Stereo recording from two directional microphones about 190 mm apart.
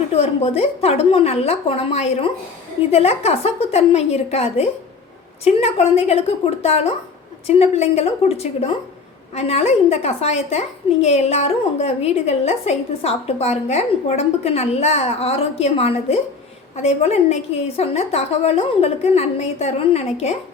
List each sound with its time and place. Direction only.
0.1 s a woman's voice: 35° left (ahead or behind)